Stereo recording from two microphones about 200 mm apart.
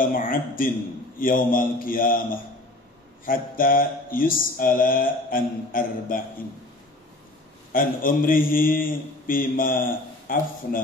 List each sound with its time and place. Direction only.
0.0 s mantra: 45° left (ahead or behind)
3.3 s mantra: 45° left (ahead or behind)
7.7 s mantra: 45° left (ahead or behind)